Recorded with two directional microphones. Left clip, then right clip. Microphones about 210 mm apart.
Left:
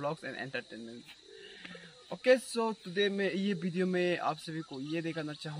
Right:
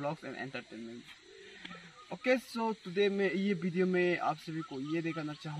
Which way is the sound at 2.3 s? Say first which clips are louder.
Left 4 dB; 25° left (ahead or behind).